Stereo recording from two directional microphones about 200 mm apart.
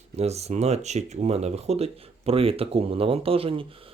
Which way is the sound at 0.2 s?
30° right (ahead or behind).